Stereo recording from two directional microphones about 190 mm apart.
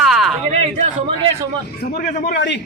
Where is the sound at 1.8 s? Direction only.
50° left (ahead or behind).